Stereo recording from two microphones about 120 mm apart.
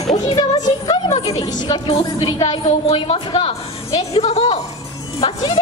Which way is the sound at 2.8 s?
55° left (ahead or behind).